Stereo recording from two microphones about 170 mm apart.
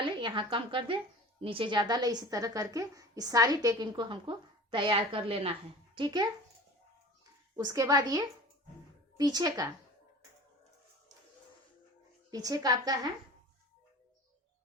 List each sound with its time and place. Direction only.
0.0 s a woman's voice: 30° right (ahead or behind)
7.5 s a woman's voice: 20° right (ahead or behind)
12.3 s a woman's voice: 20° right (ahead or behind)